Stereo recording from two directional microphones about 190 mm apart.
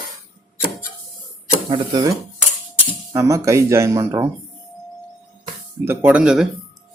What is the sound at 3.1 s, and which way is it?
Speech, 15° right (ahead or behind).